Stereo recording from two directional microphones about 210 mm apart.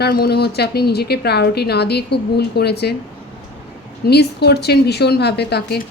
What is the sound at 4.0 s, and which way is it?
A woman's voice, 50° left (ahead or behind).